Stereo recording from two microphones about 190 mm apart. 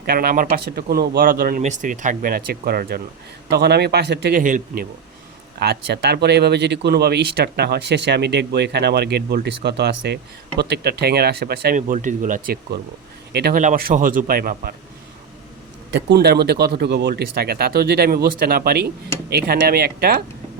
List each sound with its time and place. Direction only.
0.0 s speech: 55° right (ahead or behind)
5.5 s speech: 60° right (ahead or behind)
11.8 s speech: 40° right (ahead or behind); by 13.6 s 55° right (ahead or behind)
13.6 s speech: 45° right (ahead or behind)
15.9 s speech: 65° right (ahead or behind)